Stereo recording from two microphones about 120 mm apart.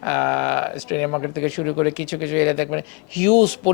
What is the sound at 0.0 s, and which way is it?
Speech, 15° left (ahead or behind).